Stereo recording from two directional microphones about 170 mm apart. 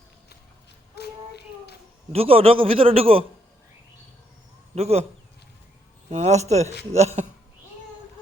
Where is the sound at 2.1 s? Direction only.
35° right (ahead or behind).